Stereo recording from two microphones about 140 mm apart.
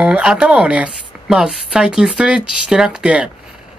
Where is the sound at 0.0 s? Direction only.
5° right (ahead or behind).